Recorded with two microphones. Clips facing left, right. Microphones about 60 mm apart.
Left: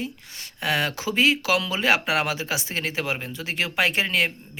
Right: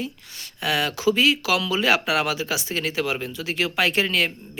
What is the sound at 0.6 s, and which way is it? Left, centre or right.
Speech, left.